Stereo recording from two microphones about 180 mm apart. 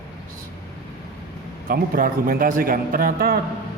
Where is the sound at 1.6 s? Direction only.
55° right (ahead or behind).